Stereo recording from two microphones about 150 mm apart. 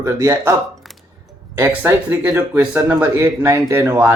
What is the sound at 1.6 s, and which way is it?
Speech, 20° right (ahead or behind).